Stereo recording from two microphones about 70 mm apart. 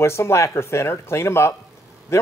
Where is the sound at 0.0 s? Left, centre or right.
Left.